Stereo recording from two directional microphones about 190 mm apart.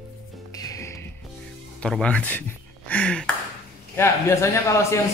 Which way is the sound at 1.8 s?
5° left (ahead or behind).